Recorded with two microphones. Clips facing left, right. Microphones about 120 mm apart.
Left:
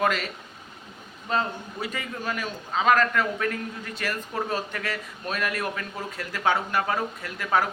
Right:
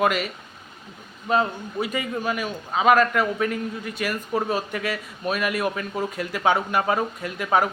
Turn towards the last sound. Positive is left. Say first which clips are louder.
# right 3 dB
turn(degrees=-20)  # may be behind; listen again after turning